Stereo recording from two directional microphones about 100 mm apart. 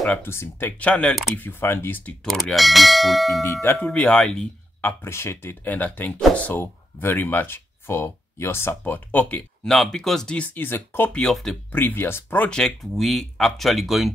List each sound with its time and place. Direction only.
0.0 s speech: 20° left (ahead or behind)
2.2 s speech: centre (ahead or behind)
4.8 s speech: 25° left (ahead or behind)
9.7 s speech: 5° left (ahead or behind)
11.1 s speech: 5° left (ahead or behind)
11.7 s speech: 20° left (ahead or behind)
12.4 s speech: 5° left (ahead or behind)